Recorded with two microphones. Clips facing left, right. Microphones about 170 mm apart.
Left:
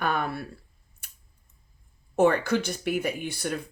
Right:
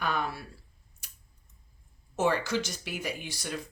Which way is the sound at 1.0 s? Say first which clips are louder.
Left 1 dB; 60° left (ahead or behind).